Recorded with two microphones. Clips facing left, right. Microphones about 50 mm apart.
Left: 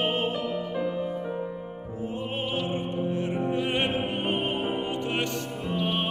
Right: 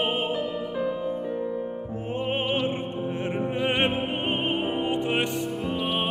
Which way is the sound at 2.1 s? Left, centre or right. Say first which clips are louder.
Right 5 dB; right.